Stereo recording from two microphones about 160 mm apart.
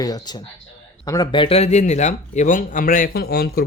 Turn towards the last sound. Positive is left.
turn(degrees=75)  # may be behind; listen again after turning